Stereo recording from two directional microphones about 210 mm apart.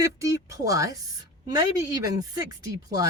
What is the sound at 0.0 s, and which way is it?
Speech, 15° right (ahead or behind).